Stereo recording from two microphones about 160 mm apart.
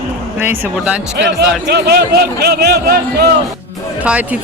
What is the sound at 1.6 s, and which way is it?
Speech, 90° right.